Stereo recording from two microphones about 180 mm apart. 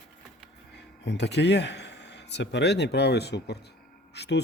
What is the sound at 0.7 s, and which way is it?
A man's voice, 75° left (ahead or behind).